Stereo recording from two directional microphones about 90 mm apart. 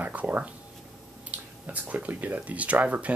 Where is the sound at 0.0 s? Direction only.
15° right (ahead or behind).